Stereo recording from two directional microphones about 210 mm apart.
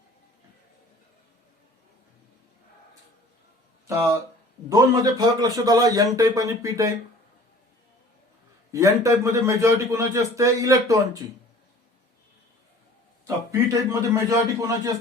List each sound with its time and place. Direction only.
3.8 s a man's voice: 15° right (ahead or behind)
8.7 s a man's voice: 15° right (ahead or behind)
13.2 s a man's voice: 15° right (ahead or behind)